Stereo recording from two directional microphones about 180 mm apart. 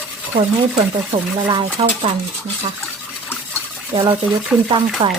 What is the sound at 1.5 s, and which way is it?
Stir, 25° right (ahead or behind).